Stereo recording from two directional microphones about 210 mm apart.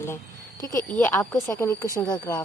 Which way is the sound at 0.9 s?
10° left (ahead or behind).